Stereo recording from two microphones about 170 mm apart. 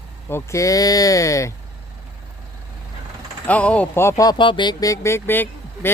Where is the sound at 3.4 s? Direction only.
10° left (ahead or behind).